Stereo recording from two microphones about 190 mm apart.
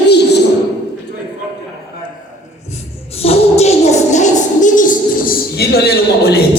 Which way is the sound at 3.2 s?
35° left (ahead or behind).